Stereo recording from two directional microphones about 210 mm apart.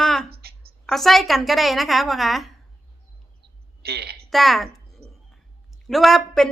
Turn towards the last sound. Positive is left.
turn(degrees=0)  # may be behind; listen again after turning